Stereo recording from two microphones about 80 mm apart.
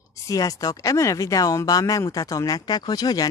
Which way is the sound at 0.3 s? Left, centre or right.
Left.